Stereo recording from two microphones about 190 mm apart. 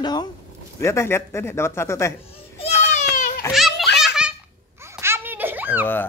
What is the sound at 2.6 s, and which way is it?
Baby cry, 40° left (ahead or behind).